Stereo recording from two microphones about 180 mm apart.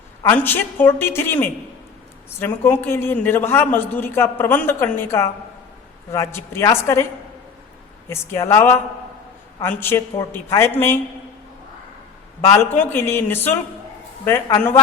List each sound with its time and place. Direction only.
0.3 s a man's voice: 10° left (ahead or behind)
8.1 s a man's voice: 15° left (ahead or behind)
12.5 s a man's voice: 10° left (ahead or behind)